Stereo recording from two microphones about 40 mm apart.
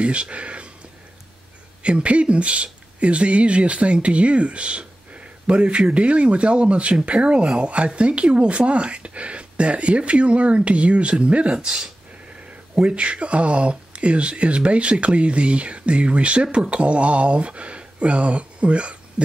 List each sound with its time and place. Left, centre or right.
0.0 s speech: right
1.8 s speech: right